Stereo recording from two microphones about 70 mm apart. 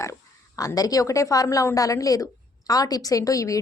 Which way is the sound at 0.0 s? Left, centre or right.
Left.